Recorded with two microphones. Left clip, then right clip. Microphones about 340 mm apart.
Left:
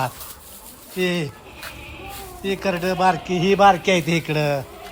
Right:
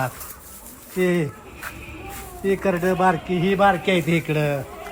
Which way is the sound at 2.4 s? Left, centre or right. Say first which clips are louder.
Right 2 dB; centre.